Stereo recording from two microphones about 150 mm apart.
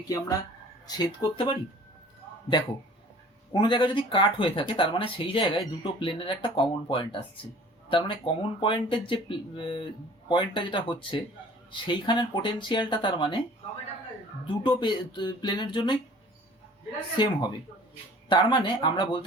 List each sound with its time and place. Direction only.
0.1 s speech: 25° left (ahead or behind)
3.5 s speech: 30° left (ahead or behind)
14.4 s speech: 30° left (ahead or behind)
17.2 s speech: 30° left (ahead or behind)